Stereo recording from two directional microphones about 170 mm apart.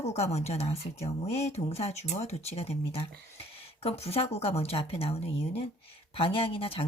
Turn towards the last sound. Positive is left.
turn(degrees=35)  # may be behind; listen again after turning